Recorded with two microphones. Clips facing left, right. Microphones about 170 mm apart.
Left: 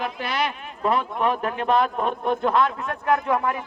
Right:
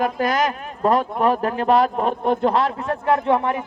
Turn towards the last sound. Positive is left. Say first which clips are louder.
# right 4 dB
turn(degrees=-30)  # may be behind; listen again after turning